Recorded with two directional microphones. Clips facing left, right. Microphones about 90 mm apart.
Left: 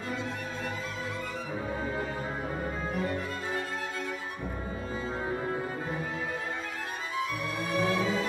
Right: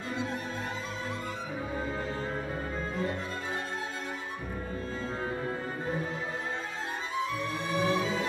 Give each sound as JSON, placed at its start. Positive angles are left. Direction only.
{"t": 7.6, "sound": "music", "side_deg": -20}